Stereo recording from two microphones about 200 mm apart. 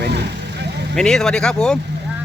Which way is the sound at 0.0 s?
55° right (ahead or behind).